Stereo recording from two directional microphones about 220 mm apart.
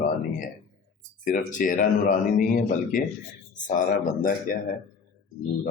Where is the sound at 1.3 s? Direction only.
35° left (ahead or behind).